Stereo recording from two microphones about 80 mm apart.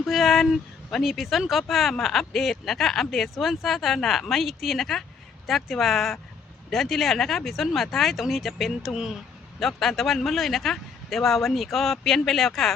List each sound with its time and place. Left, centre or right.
0.0 s speech: centre